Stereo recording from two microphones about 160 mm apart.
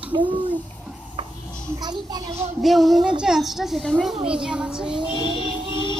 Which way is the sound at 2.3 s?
40° right (ahead or behind).